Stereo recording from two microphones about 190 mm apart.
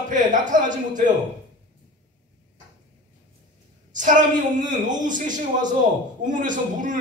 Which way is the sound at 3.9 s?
40° right (ahead or behind).